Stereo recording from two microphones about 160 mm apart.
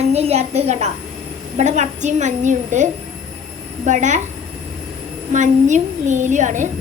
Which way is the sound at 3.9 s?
50° right (ahead or behind).